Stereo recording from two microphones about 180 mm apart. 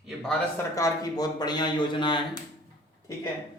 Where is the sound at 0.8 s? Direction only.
20° left (ahead or behind).